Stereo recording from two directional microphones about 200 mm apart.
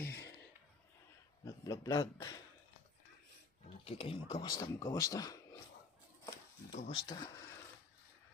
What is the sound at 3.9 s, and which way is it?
Speech, 30° left (ahead or behind).